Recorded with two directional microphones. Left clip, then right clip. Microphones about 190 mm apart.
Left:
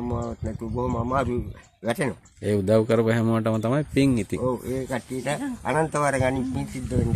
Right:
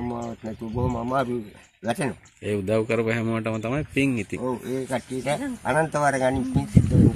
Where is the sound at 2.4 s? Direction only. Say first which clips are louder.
Left 3 dB; 70° left (ahead or behind).